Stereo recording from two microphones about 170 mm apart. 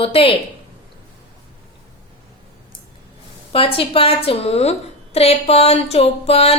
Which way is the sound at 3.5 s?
35° left (ahead or behind).